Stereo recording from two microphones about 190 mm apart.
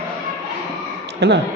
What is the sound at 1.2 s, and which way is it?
Speech, 65° right (ahead or behind).